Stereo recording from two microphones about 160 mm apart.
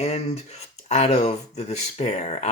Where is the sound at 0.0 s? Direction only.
40° left (ahead or behind).